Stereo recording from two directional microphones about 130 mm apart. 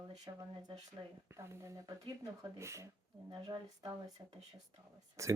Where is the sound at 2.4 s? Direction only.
20° right (ahead or behind).